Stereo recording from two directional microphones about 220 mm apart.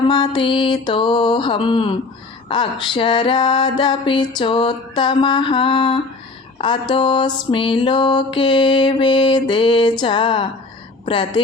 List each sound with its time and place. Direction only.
0.1 s music: 20° left (ahead or behind)
11.0 s speech: 20° left (ahead or behind)